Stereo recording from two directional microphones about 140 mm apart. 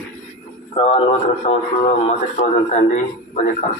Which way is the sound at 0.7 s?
40° left (ahead or behind).